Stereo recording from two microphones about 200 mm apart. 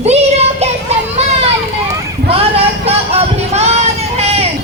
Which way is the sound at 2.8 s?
30° right (ahead or behind).